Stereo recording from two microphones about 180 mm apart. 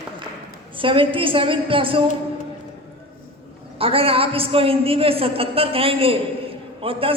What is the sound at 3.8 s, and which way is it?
A man's voice, 30° right (ahead or behind).